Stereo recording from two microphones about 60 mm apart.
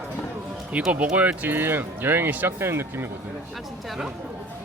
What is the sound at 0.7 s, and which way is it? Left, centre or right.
Speech, centre.